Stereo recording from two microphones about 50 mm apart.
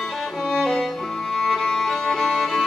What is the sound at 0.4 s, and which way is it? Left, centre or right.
Music, centre.